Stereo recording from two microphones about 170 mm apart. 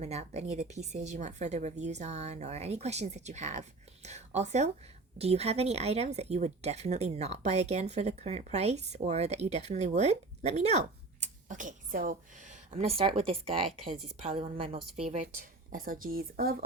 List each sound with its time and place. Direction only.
0.0 s a woman's voice: 40° right (ahead or behind)
15.7 s speech: 55° right (ahead or behind)